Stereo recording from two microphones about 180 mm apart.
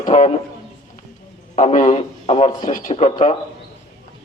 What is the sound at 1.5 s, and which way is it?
A man's voice, 40° left (ahead or behind).